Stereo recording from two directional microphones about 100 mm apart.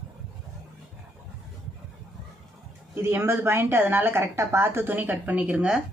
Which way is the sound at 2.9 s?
25° right (ahead or behind).